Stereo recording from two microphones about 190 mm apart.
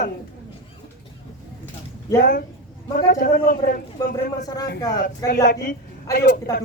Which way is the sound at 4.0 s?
20° left (ahead or behind).